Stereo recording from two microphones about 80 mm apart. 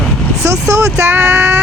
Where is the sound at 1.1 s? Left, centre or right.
Right.